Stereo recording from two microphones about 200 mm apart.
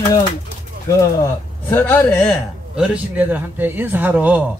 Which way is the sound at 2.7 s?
5° right (ahead or behind).